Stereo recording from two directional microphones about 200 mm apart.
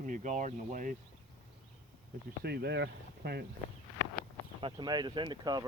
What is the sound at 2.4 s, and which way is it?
Speech, 55° right (ahead or behind).